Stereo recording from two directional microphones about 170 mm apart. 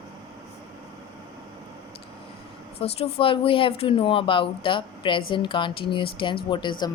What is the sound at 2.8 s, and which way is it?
Speech, 35° left (ahead or behind).